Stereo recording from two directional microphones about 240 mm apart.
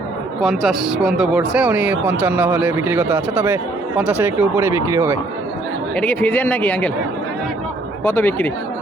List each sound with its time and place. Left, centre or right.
0.4 s speech: centre
6.0 s speech: centre
8.0 s speech: centre